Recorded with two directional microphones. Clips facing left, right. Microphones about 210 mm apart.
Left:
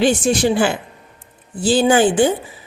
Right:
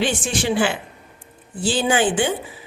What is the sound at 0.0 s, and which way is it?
Speech, 40° left (ahead or behind).